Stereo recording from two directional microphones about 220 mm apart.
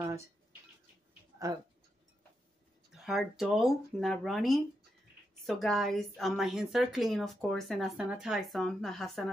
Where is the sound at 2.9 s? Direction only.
Centre (ahead or behind).